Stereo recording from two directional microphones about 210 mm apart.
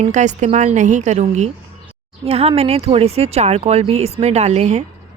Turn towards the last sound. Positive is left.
turn(degrees=-30)  # may be behind; listen again after turning